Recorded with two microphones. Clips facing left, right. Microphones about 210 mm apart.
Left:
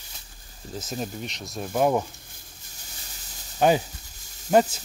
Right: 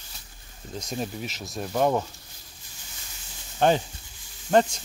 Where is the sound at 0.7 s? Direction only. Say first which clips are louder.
Even; centre (ahead or behind).